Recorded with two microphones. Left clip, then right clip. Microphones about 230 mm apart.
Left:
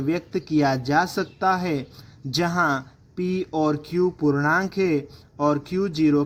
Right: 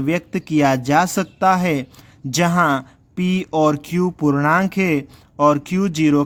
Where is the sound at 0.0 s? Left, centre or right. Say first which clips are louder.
Right 4 dB; right.